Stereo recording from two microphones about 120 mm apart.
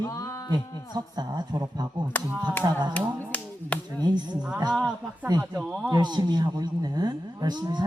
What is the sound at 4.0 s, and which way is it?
Speech, 35° right (ahead or behind).